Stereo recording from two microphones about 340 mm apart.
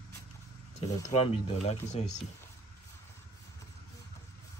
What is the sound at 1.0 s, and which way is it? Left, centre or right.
Speech, centre.